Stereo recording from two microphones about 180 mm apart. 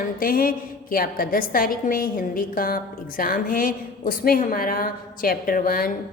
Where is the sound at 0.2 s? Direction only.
50° left (ahead or behind).